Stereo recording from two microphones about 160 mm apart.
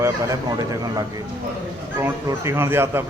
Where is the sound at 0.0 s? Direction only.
20° right (ahead or behind).